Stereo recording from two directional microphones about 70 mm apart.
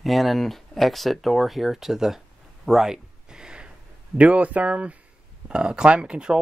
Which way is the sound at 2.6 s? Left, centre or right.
Centre.